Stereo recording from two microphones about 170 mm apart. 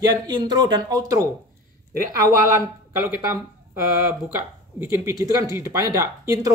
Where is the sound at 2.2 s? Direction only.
15° right (ahead or behind).